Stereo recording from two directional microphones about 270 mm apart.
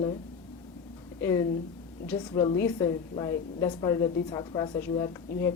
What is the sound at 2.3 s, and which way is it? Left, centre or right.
A woman's voice, centre.